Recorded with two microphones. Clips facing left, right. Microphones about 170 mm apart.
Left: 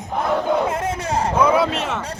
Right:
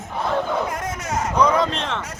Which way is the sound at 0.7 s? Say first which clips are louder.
Left 4 dB; 30° left (ahead or behind).